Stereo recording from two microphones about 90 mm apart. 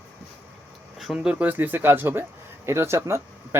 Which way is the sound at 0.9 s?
5° right (ahead or behind).